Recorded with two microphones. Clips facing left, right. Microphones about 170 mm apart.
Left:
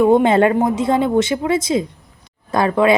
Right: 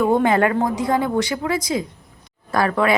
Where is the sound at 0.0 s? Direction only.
20° left (ahead or behind).